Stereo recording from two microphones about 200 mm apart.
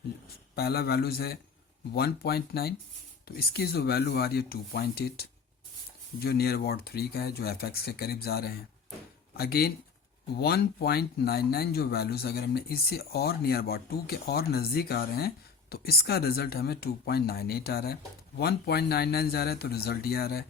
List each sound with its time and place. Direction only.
0.5 s speech: 50° left (ahead or behind)